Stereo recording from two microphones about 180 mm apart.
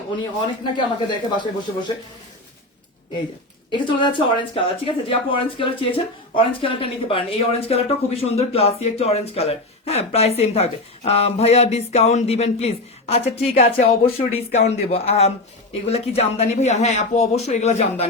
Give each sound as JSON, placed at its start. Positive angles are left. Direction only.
{"t": 0.2, "sound": "speech", "side_deg": 25}
{"t": 3.7, "sound": "speech", "side_deg": 25}